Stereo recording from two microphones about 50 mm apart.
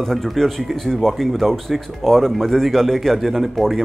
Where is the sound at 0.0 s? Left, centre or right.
Centre.